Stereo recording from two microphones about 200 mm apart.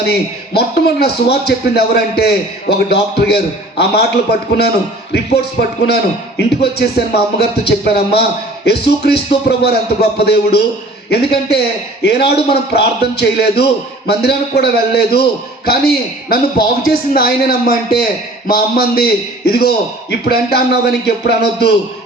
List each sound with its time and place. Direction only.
0.0 s a man's voice: 55° left (ahead or behind)